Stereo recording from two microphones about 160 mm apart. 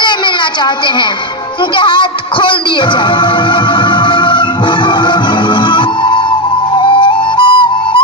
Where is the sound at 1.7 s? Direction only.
30° left (ahead or behind).